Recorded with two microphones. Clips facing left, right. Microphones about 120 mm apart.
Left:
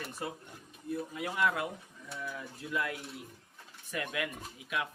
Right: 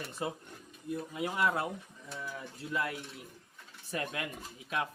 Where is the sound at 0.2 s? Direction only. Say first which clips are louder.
Right 3 dB; 20° right (ahead or behind).